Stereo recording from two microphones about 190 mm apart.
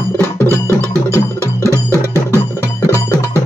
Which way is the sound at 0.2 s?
10° left (ahead or behind).